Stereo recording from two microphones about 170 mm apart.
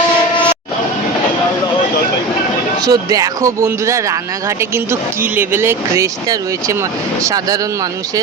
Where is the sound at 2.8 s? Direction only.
20° right (ahead or behind).